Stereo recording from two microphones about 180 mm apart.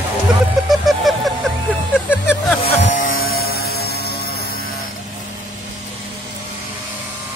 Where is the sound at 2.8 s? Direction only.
50° left (ahead or behind).